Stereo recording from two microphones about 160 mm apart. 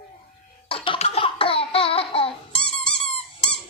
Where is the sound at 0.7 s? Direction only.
35° left (ahead or behind).